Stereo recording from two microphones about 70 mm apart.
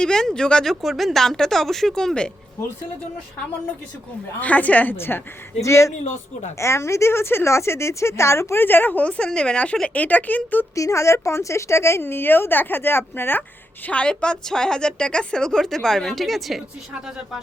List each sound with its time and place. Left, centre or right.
0.0 s speech: centre
4.4 s speech: left
5.6 s speech: left
10.8 s speech: left
13.8 s a woman's voice: centre